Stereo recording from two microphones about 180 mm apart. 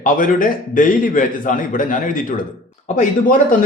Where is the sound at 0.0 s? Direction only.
50° left (ahead or behind).